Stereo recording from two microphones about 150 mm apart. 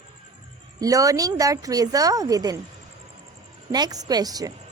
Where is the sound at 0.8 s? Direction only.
25° right (ahead or behind).